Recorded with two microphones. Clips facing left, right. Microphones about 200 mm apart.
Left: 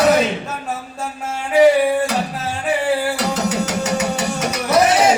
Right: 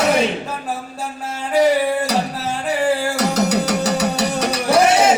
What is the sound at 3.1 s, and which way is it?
Music, 40° right (ahead or behind).